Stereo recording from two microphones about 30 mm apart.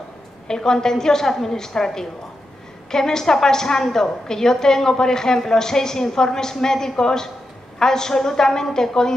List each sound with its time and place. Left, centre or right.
0.5 s a woman's voice: left